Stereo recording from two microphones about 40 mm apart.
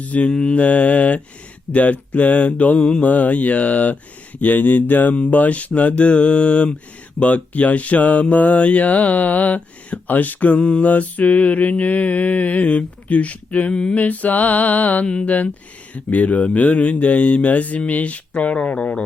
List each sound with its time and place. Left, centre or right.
0.0 s speech: left
0.3 s mantra: left
0.6 s speech: left
3.0 s speech: left
15.0 s mantra: left
16.0 s speech: left